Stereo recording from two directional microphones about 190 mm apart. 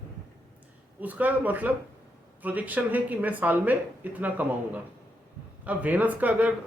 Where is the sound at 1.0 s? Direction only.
10° right (ahead or behind).